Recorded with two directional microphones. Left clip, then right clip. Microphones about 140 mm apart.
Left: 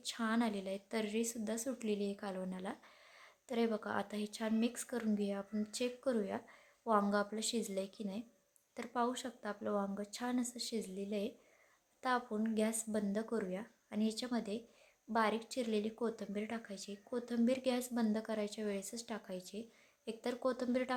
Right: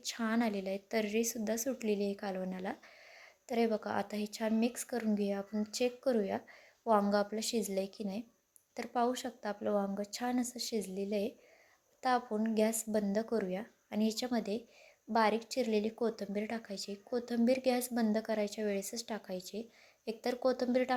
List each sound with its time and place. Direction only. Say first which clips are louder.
0.0 s speech: right 3 dB; 15° right (ahead or behind)